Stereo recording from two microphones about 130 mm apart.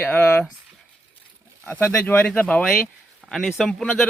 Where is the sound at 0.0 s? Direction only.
10° left (ahead or behind).